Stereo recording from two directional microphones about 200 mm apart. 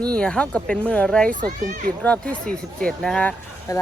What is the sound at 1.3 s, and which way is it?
Speech, 40° right (ahead or behind).